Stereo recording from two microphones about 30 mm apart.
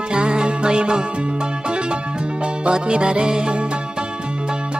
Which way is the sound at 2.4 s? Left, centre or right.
Right.